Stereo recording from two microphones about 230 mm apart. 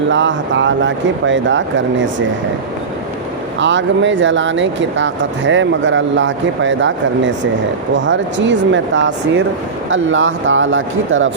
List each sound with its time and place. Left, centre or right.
0.1 s speech: right
3.6 s speech: right